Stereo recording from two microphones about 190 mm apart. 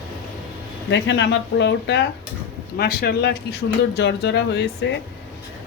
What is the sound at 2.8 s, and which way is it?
Speech, 55° left (ahead or behind).